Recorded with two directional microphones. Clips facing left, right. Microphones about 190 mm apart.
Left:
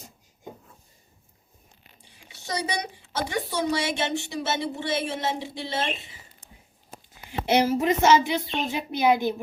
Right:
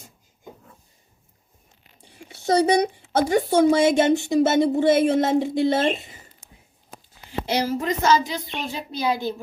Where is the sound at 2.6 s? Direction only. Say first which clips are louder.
Right 12 dB; 50° right (ahead or behind).